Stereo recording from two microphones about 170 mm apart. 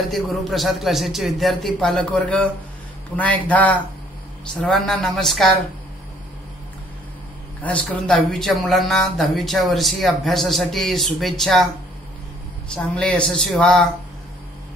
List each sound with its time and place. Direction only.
0.0 s speech: centre (ahead or behind)
7.6 s speech: 10° left (ahead or behind)
12.7 s speech: 5° left (ahead or behind)